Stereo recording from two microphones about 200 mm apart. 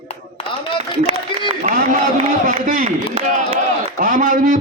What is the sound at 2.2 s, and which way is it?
A man's voice, 35° right (ahead or behind).